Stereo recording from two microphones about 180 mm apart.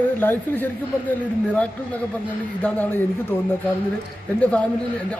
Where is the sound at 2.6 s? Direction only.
10° left (ahead or behind).